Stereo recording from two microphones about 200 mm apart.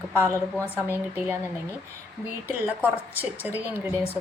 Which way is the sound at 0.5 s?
10° left (ahead or behind).